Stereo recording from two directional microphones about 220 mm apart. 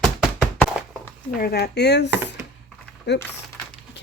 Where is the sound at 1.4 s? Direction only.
45° left (ahead or behind).